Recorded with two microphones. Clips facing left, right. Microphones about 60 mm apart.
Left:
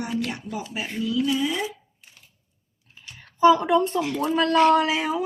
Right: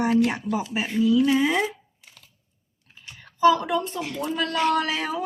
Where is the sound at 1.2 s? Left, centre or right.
Right.